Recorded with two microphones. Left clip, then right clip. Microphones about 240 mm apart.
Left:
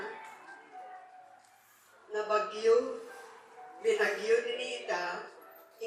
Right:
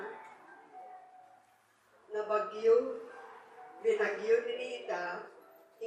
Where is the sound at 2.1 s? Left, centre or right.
Centre.